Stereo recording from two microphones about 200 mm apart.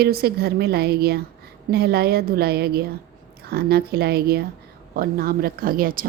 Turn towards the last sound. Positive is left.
turn(degrees=-45)  # may be behind; listen again after turning